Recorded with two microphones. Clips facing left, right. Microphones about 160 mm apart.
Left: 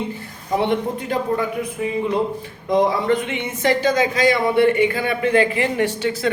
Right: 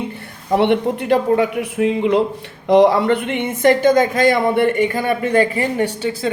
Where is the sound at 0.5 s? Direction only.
65° right (ahead or behind); by 5.6 s 40° right (ahead or behind).